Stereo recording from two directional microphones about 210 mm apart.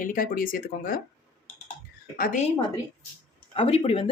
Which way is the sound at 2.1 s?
45° left (ahead or behind).